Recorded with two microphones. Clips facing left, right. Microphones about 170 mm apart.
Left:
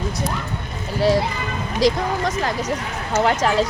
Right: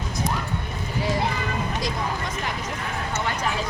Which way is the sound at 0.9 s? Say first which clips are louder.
Left 7 dB; 75° left (ahead or behind).